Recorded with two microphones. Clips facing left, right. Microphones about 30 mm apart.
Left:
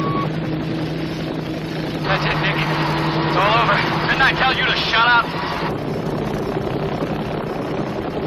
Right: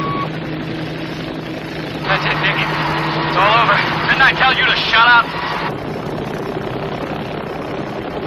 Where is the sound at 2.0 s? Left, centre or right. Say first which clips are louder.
Right 4 dB; centre.